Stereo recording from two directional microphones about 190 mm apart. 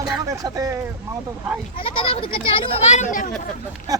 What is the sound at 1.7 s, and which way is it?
A child's voice, 30° left (ahead or behind).